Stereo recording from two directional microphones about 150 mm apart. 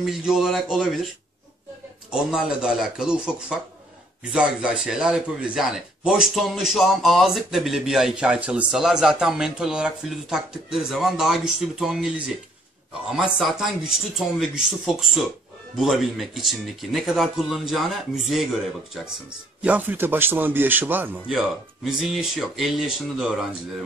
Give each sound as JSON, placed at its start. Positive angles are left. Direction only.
{"t": 0.0, "sound": "speech", "side_deg": -5}
{"t": 2.0, "sound": "speech", "side_deg": -5}
{"t": 13.1, "sound": "speech", "side_deg": -5}
{"t": 19.6, "sound": "a man's voice", "side_deg": -10}